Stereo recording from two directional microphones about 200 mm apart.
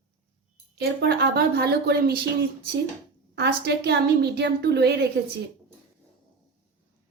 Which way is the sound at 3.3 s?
55° right (ahead or behind).